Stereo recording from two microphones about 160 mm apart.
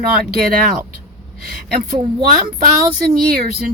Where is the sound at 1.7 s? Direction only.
70° right (ahead or behind).